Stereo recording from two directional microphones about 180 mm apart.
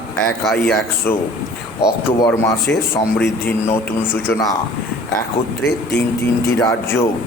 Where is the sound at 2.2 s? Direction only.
15° left (ahead or behind).